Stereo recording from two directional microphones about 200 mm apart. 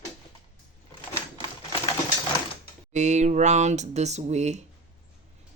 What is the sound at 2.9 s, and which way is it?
Speech, 35° right (ahead or behind).